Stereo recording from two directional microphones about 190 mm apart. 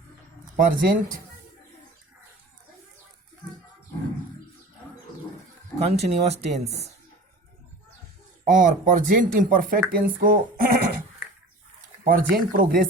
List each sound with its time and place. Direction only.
0.5 s speech: 45° right (ahead or behind)
6.0 s speech: 35° right (ahead or behind)
8.4 s speech: 45° right (ahead or behind)
12.0 s speech: 45° right (ahead or behind)